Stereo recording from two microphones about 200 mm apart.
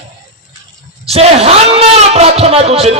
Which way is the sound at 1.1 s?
30° right (ahead or behind).